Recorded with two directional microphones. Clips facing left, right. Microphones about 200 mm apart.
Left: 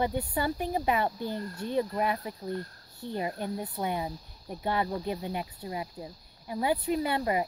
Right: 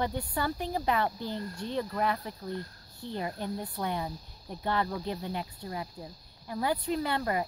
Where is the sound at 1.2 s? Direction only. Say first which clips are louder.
Left 2 dB; 50° left (ahead or behind).